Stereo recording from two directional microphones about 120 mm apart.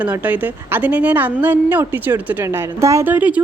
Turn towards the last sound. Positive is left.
turn(degrees=-15)  # may be behind; listen again after turning